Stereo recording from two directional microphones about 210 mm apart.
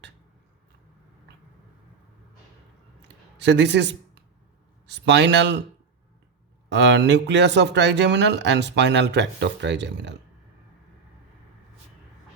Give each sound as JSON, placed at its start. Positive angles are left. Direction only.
{"t": 3.3, "sound": "speech", "side_deg": -55}
{"t": 6.7, "sound": "speech", "side_deg": -55}